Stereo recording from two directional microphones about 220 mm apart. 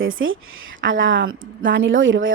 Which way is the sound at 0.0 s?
65° right (ahead or behind).